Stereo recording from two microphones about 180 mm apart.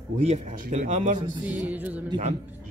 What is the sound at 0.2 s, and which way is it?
Speech, 40° right (ahead or behind).